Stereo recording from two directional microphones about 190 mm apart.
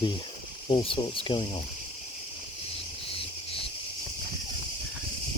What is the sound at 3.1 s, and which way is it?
Cricket, 30° left (ahead or behind).